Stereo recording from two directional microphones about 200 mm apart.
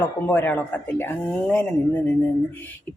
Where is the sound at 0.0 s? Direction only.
10° left (ahead or behind).